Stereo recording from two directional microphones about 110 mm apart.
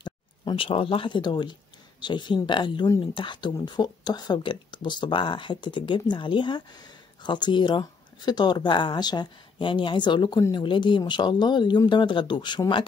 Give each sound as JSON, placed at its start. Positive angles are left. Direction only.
{"t": 0.0, "sound": "speech", "side_deg": 50}